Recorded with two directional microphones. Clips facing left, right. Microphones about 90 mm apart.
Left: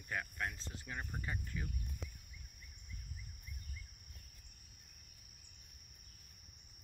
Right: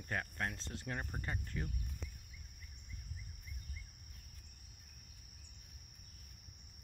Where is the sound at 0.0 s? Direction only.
45° right (ahead or behind).